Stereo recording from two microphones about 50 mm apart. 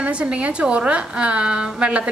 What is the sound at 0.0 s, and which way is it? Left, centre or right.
A woman's voice, right.